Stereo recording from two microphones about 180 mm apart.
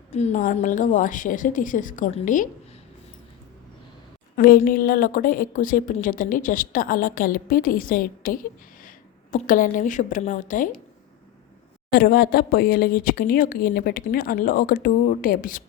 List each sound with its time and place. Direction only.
0.1 s a woman's voice: 40° left (ahead or behind)
4.4 s a woman's voice: 50° left (ahead or behind)
11.9 s a woman's voice: 55° left (ahead or behind)